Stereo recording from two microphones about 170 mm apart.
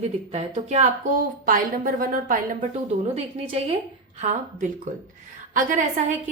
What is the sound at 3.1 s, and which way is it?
A woman's voice, 35° right (ahead or behind).